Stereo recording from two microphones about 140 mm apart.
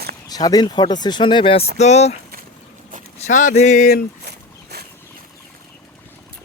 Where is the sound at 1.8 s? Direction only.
55° left (ahead or behind).